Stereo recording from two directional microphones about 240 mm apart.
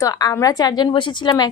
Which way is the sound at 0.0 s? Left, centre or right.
Centre.